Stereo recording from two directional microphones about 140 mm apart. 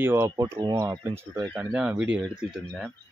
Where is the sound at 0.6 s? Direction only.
30° right (ahead or behind).